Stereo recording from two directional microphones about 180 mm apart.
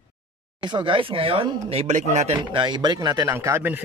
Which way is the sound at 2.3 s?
25° right (ahead or behind).